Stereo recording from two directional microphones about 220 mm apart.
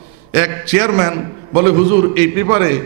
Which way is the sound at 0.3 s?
10° right (ahead or behind).